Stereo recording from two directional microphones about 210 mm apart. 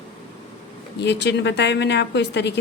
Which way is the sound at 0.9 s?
55° left (ahead or behind).